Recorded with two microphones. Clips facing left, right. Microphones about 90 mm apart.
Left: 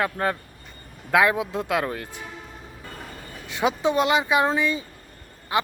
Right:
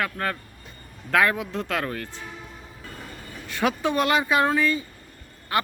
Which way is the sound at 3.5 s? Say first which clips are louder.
Left 2 dB; 20° left (ahead or behind).